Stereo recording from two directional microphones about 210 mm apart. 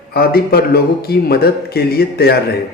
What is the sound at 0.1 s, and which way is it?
Speech, 45° left (ahead or behind).